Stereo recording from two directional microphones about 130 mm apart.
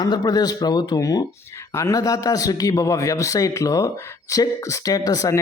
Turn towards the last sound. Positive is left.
turn(degrees=25)  # may be behind; listen again after turning